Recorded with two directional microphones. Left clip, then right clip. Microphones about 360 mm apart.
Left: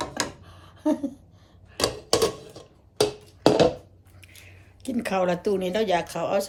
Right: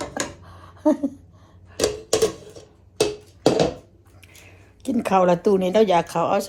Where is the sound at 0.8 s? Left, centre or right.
Centre.